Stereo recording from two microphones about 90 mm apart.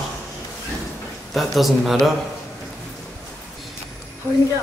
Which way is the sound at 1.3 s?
Centre (ahead or behind).